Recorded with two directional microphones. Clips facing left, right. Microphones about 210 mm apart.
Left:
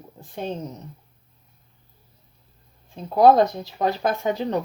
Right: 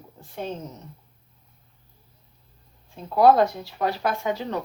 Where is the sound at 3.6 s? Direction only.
20° left (ahead or behind).